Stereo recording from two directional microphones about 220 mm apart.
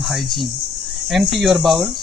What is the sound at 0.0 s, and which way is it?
Speech, centre (ahead or behind).